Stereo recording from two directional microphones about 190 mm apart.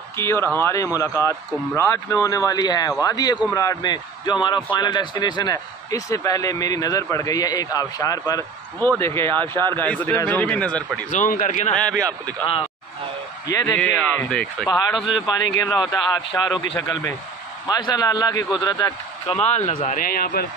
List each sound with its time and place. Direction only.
0.2 s speech: 15° left (ahead or behind)
11.1 s a man's voice: 45° left (ahead or behind)
11.7 s speech: 5° left (ahead or behind)
13.5 s speech: 15° left (ahead or behind); by 15.2 s 5° right (ahead or behind)
15.9 s speech: 20° left (ahead or behind)
19.4 s a man's voice: 35° left (ahead or behind)
20.0 s a man's voice: 50° left (ahead or behind)